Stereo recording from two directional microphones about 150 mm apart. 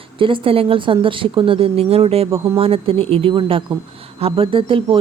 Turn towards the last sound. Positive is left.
turn(degrees=-35)  # may be behind; listen again after turning